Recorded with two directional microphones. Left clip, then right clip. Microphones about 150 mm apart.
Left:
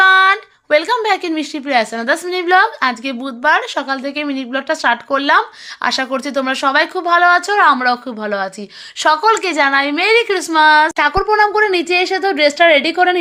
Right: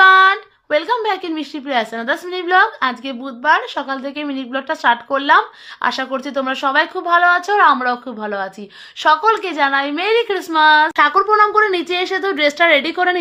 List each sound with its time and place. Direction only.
0.0 s speech: 25° left (ahead or behind)
10.9 s speech: 15° left (ahead or behind)